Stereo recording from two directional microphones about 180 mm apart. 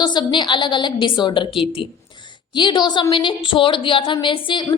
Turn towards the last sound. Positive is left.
turn(degrees=25)  # may be behind; listen again after turning